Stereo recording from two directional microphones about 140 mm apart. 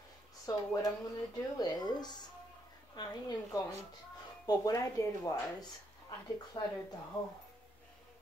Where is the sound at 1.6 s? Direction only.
30° left (ahead or behind).